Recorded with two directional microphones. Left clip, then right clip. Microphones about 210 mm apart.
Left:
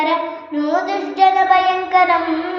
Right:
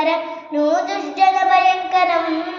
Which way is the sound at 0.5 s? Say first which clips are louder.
Right 1 dB; 20° right (ahead or behind).